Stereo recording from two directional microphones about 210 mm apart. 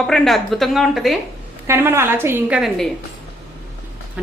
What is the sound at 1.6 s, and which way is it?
A woman's voice, 10° right (ahead or behind).